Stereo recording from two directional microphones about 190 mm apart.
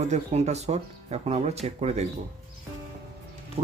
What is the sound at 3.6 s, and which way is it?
Speech, 30° right (ahead or behind).